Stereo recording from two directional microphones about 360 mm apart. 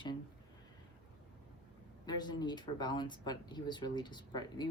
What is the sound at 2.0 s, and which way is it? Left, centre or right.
Speech, centre.